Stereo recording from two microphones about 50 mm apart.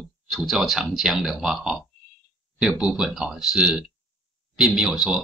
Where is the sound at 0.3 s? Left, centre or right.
Centre.